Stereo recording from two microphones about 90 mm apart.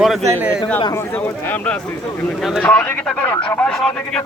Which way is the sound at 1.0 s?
20° left (ahead or behind).